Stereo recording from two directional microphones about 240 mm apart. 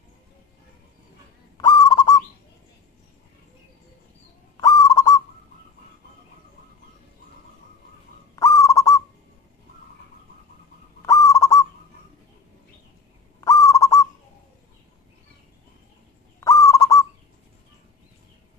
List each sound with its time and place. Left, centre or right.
1.6 s owl: centre
4.6 s owl: centre
8.4 s owl: centre
11.1 s owl: centre
13.4 s owl: centre
16.3 s goose: centre